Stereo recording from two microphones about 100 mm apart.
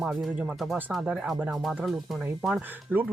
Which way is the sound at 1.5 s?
Centre (ahead or behind).